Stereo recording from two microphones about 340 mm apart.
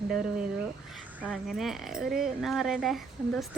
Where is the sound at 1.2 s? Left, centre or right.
Centre.